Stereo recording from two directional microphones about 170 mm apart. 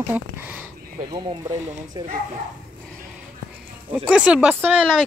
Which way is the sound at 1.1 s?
25° right (ahead or behind).